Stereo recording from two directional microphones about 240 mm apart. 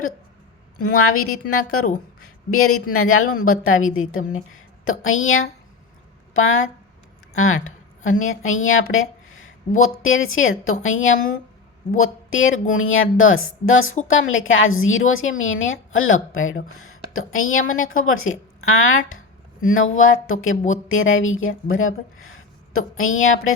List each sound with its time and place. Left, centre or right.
0.9 s a woman's voice: left
2.2 s a sound: left
2.9 s a woman's voice: left